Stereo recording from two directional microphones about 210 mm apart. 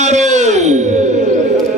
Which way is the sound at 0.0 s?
35° right (ahead or behind).